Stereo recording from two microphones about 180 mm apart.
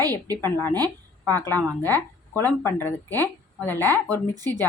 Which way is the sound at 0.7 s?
20° right (ahead or behind).